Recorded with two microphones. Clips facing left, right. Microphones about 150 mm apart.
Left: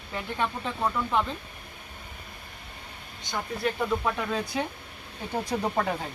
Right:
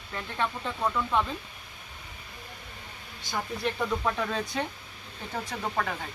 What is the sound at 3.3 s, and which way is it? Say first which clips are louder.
Speech: left 1 dB; centre (ahead or behind).